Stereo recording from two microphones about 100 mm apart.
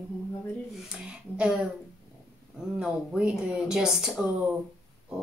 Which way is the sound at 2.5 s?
10° right (ahead or behind).